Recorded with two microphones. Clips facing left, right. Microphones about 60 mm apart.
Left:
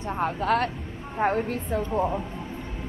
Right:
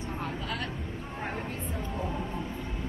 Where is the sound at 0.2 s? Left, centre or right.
Left.